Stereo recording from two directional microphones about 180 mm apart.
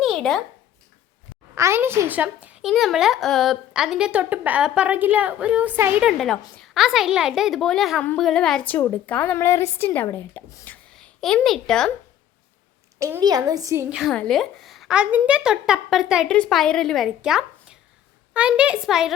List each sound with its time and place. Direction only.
0.0 s a sound: centre (ahead or behind)
1.5 s a woman's voice: 15° right (ahead or behind); by 11.9 s 5° left (ahead or behind)
13.0 s speech: 15° right (ahead or behind)
13.9 s a woman's voice: centre (ahead or behind)